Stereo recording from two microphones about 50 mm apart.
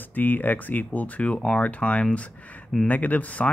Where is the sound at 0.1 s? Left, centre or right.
Left.